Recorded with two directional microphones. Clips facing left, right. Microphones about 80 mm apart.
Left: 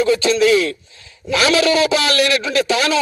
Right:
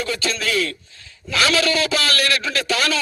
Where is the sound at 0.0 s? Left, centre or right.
Left.